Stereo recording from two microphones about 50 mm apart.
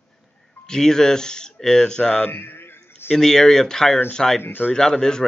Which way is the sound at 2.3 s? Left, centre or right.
Left.